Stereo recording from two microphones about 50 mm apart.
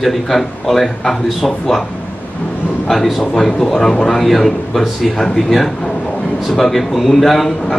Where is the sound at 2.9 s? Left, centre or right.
Centre.